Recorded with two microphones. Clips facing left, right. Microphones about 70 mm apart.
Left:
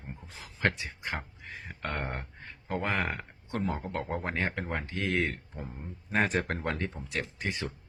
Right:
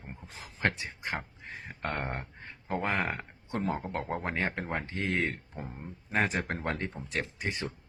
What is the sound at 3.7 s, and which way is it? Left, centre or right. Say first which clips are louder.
Speech: even; right.